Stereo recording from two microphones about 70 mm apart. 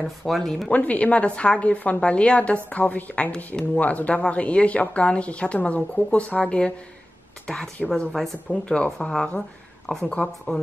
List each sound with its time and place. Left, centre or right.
0.4 s a woman's voice: centre
0.7 s a woman's voice: left; by 8.4 s centre
8.5 s a woman's voice: centre